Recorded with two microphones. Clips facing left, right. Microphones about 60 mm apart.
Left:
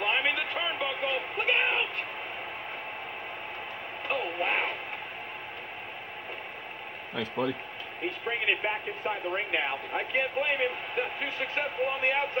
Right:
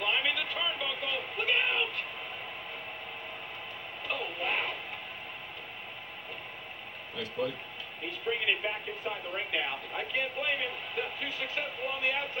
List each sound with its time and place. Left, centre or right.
0.0 s a sound: left
4.1 s radio: left
8.0 s speech: left